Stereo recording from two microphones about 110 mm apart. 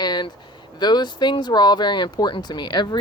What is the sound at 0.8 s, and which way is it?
Speech, 40° left (ahead or behind).